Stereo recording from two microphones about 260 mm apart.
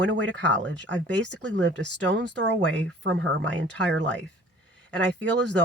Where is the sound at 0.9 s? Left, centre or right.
Right.